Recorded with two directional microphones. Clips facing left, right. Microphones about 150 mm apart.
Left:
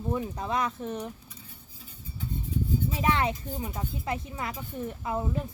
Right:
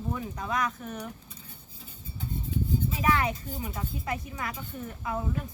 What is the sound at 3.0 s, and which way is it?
Speech, 25° left (ahead or behind).